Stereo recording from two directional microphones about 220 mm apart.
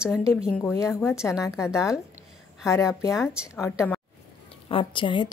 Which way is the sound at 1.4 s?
15° left (ahead or behind).